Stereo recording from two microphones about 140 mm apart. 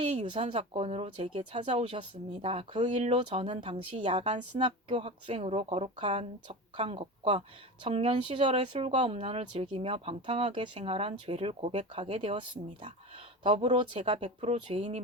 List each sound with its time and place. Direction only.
0.1 s speech: 50° right (ahead or behind)
1.4 s speech: 55° right (ahead or behind)
1.7 s speech: 40° right (ahead or behind)
8.7 s speech: 55° right (ahead or behind)
11.9 s speech: 45° right (ahead or behind)